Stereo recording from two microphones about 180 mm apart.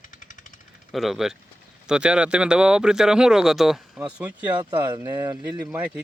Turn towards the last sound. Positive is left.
turn(degrees=-5)  # may be behind; listen again after turning